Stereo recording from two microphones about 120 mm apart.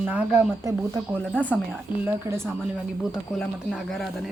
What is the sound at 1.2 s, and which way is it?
Speech, 10° left (ahead or behind).